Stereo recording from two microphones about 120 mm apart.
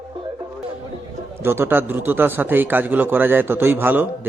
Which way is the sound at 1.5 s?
20° right (ahead or behind).